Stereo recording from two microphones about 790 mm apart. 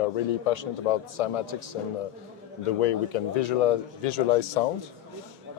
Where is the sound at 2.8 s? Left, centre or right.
Left.